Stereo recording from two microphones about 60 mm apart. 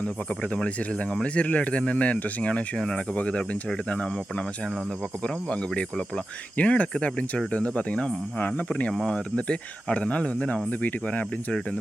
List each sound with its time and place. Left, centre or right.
1.1 s speech: centre
5.2 s speech: centre